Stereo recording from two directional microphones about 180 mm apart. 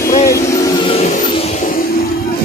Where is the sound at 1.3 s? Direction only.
35° left (ahead or behind).